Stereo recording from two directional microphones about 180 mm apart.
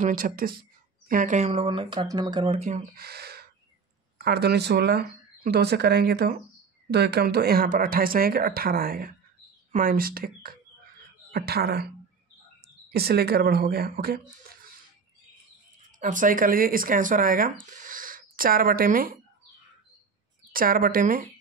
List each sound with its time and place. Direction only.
0.0 s speech: 50° right (ahead or behind)
3.0 s speech: 60° right (ahead or behind)
16.0 s speech: 45° right (ahead or behind)
20.5 s speech: 50° right (ahead or behind)